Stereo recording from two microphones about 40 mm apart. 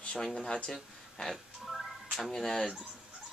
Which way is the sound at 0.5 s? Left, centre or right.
Left.